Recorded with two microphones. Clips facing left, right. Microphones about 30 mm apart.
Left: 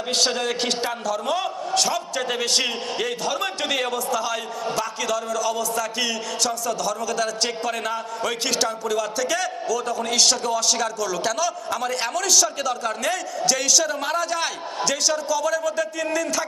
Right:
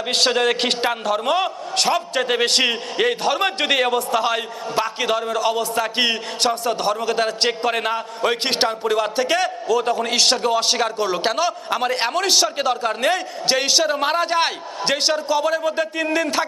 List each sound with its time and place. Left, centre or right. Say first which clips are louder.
0.3 s a man's voice: right 5 dB; right